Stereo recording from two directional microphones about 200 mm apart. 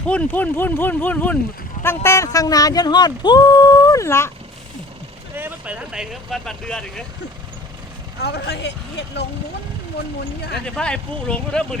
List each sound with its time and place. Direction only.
0.0 s speech: 5° left (ahead or behind)
5.3 s speech: 10° right (ahead or behind)
8.2 s speech: 55° left (ahead or behind)
10.8 s speech: 5° left (ahead or behind)